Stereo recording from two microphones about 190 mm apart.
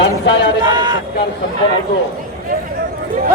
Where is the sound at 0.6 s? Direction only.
25° right (ahead or behind).